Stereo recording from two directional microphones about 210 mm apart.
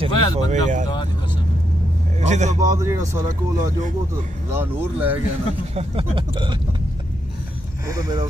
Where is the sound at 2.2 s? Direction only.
35° right (ahead or behind).